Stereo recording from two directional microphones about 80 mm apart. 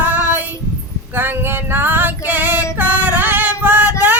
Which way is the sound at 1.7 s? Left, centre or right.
Right.